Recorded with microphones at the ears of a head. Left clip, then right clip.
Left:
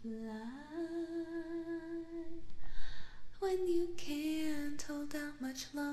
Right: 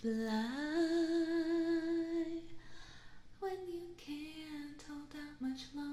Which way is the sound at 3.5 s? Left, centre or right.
Left.